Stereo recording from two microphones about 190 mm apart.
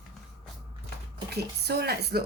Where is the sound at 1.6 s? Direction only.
60° right (ahead or behind).